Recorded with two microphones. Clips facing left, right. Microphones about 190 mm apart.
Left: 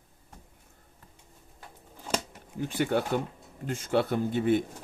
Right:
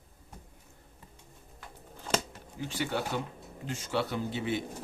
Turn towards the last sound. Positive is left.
turn(degrees=50)  # may be behind; listen again after turning